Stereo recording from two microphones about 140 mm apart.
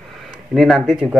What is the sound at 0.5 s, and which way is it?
Speech, centre (ahead or behind).